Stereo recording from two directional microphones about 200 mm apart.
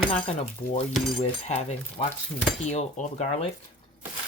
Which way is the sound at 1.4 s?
35° left (ahead or behind).